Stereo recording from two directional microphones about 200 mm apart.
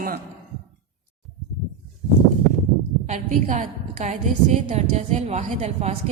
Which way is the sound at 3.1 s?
40° right (ahead or behind).